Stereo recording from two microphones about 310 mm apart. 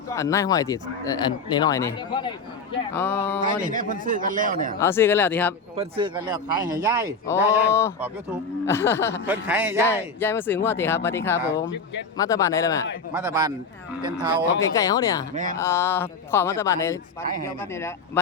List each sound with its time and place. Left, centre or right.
0.1 s speech: centre
3.6 s a man's voice: right
4.8 s speech: centre
5.7 s speech: centre
7.7 s speech: centre
9.2 s speech: centre
9.8 s speech: centre
13.1 s speech: centre
14.8 s speech: centre